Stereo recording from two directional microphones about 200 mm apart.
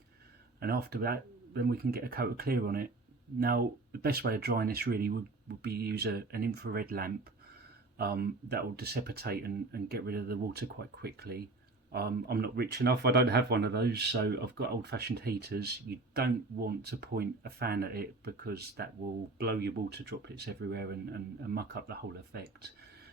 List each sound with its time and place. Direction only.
0.6 s speech: 50° right (ahead or behind)
4.0 s speech: 50° right (ahead or behind)